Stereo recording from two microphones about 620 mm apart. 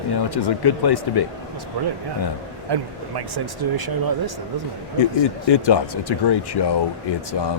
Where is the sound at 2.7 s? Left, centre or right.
Right.